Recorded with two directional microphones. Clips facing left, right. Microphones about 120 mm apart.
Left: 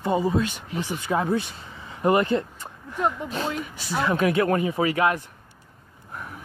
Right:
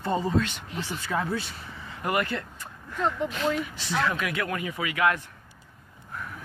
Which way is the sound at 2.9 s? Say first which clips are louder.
Left 2 dB; 10° left (ahead or behind).